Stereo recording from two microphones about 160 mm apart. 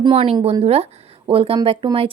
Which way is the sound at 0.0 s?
35° right (ahead or behind).